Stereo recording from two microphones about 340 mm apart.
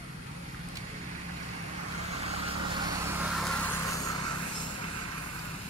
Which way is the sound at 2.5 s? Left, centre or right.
Centre.